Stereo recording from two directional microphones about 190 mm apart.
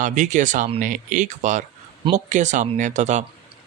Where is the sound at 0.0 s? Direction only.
40° right (ahead or behind).